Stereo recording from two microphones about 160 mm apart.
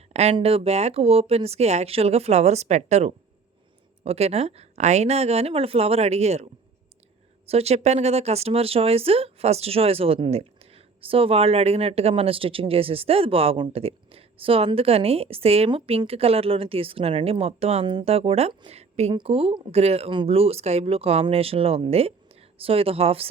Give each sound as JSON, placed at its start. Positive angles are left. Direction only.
{"t": 0.1, "sound": "speech", "side_deg": -40}